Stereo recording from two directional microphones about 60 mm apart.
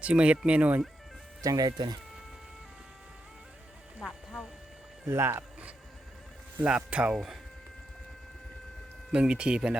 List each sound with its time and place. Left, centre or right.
0.0 s speech: centre
1.4 s speech: right
4.0 s music: centre
5.0 s speech: right
5.4 s music: right
6.6 s speech: centre
9.1 s speech: centre